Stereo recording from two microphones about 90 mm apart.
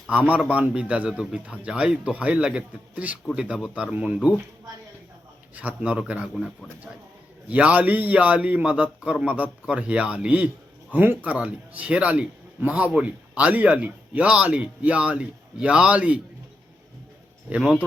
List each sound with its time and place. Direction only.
0.1 s speech: 15° right (ahead or behind)
5.5 s speech: 15° right (ahead or behind)
17.5 s speech: 15° right (ahead or behind)